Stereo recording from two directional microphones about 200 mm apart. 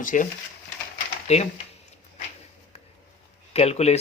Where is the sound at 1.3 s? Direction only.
35° left (ahead or behind).